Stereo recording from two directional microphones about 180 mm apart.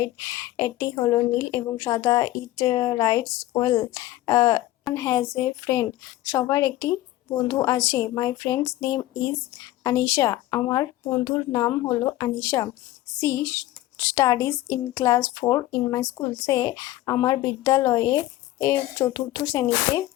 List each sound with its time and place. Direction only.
0.0 s a woman's voice: 15° left (ahead or behind)
13.9 s speech: 15° left (ahead or behind)